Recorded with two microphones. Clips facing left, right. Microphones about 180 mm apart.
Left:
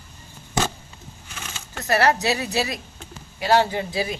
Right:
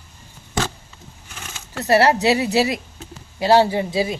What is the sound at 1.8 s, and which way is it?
A woman's voice, 30° right (ahead or behind).